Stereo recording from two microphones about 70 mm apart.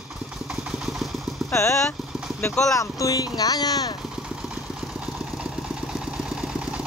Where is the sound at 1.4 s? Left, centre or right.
Left.